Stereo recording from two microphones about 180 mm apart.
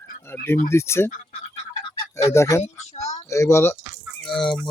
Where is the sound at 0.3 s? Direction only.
15° left (ahead or behind).